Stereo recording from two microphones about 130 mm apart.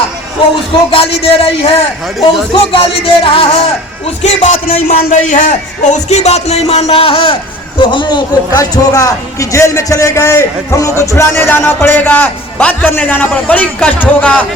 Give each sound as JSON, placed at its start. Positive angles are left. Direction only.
{"t": 0.9, "sound": "speech", "side_deg": 45}
{"t": 4.2, "sound": "speech", "side_deg": 55}
{"t": 5.1, "sound": "a man's voice", "side_deg": 75}